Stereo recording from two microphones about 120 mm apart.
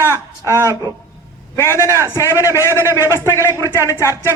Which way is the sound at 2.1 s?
20° left (ahead or behind).